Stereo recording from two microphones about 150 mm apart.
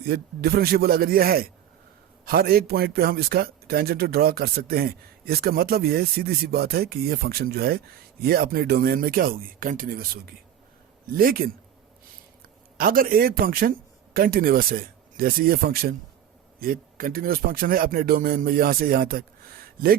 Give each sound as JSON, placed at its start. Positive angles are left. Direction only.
{"t": 0.1, "sound": "a man's voice", "side_deg": -90}